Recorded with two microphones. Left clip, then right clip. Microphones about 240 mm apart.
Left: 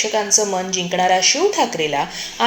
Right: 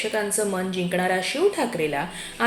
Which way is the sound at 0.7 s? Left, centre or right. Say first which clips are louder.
Left 9 dB; left.